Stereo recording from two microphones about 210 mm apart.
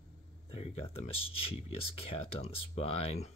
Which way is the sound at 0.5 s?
30° left (ahead or behind).